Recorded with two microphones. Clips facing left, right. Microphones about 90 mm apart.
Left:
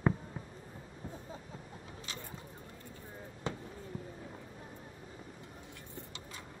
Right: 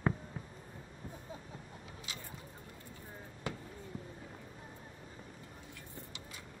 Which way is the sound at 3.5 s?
25° left (ahead or behind).